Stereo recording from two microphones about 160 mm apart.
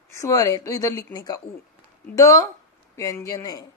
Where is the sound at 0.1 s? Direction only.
20° left (ahead or behind).